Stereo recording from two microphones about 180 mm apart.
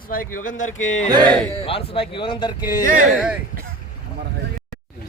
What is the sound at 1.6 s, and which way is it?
Speech, 30° left (ahead or behind).